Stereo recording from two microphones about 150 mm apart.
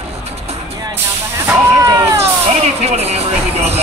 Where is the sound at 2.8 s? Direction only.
45° right (ahead or behind).